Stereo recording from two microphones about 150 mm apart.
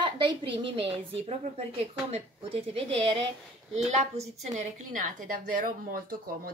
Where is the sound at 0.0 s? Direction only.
30° right (ahead or behind).